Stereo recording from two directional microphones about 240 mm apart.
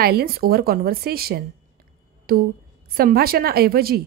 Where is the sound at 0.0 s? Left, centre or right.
Right.